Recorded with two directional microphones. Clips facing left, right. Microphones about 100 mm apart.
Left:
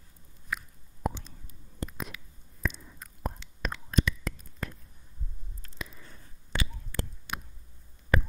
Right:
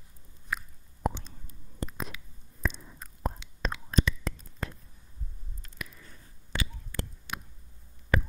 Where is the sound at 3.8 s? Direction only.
30° right (ahead or behind).